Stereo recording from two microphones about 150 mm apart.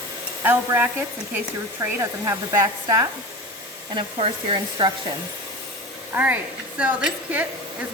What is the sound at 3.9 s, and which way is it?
Speech, 35° right (ahead or behind).